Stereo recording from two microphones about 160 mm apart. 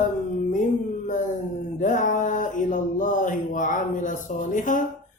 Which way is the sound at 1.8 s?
55° left (ahead or behind).